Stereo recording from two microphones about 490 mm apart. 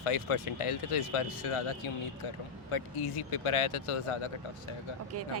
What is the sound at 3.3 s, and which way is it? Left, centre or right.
Speech, left.